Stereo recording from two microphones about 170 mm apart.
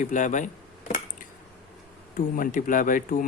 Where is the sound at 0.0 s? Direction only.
50° left (ahead or behind).